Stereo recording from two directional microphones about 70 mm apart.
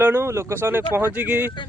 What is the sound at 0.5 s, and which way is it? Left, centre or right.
Speech, right.